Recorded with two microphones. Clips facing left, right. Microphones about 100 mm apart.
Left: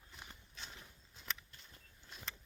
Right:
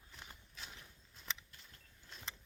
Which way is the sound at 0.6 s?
5° right (ahead or behind).